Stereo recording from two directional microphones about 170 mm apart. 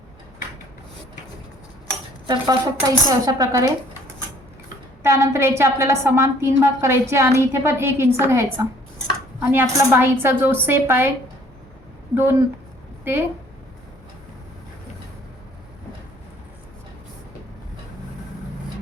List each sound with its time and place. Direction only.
2.2 s speech: 25° right (ahead or behind)
5.0 s a woman's voice: 15° right (ahead or behind)
12.1 s a woman's voice: 15° right (ahead or behind)